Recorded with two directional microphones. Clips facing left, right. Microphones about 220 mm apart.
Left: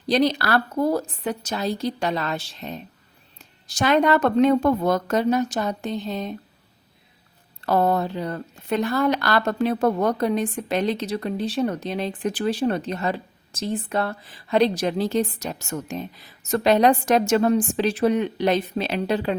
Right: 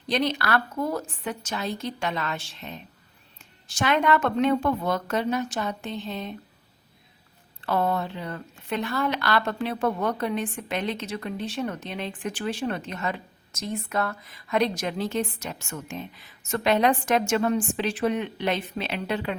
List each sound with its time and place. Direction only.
0.1 s a woman's voice: 35° left (ahead or behind)
7.6 s a woman's voice: 40° left (ahead or behind)